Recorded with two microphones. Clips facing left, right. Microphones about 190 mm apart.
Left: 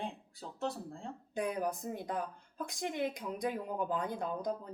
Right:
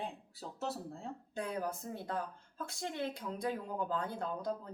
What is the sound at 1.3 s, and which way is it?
Speech, 15° left (ahead or behind).